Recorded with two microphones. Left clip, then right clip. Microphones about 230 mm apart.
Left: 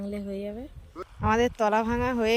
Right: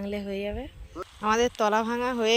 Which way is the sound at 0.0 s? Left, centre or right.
Centre.